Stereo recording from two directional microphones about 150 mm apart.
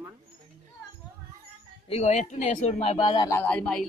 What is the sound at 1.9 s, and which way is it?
A man's voice, 45° left (ahead or behind).